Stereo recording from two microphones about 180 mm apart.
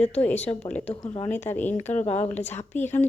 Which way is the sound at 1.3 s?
10° left (ahead or behind).